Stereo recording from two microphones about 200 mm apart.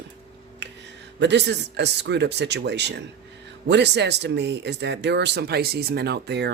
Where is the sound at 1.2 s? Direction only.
60° right (ahead or behind).